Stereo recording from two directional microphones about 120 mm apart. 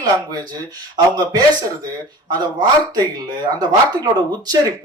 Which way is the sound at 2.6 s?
35° right (ahead or behind).